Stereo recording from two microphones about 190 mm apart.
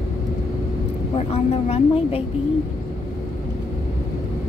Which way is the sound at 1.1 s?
35° left (ahead or behind).